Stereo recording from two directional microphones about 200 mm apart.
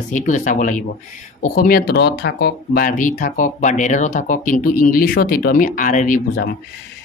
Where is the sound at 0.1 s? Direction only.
40° left (ahead or behind).